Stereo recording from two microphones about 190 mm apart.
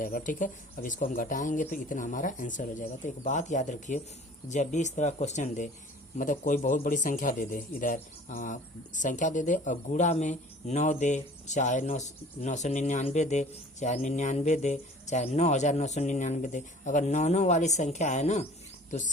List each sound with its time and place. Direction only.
0.0 s a man's voice: 45° left (ahead or behind)